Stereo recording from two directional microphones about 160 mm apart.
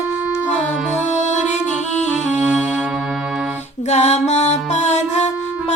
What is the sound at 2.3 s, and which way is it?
Music, 5° right (ahead or behind).